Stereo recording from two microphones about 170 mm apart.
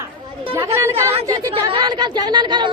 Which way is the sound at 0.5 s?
15° right (ahead or behind).